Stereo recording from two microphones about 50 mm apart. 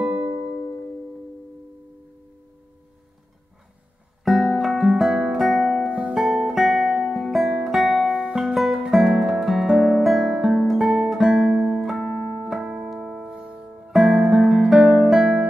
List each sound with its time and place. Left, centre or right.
0.0 s music: right
4.2 s music: centre
5.9 s music: right
6.1 s music: centre
10.7 s guitar: centre
11.7 s music: centre
13.9 s music: centre